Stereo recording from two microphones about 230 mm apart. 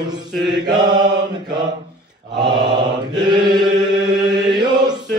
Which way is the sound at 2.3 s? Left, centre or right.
Centre.